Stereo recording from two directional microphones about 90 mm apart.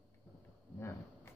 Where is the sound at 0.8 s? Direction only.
30° left (ahead or behind).